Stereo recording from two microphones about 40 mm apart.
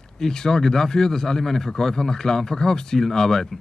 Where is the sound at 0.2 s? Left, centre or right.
Centre.